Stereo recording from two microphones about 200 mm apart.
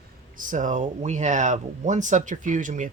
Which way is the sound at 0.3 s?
40° right (ahead or behind).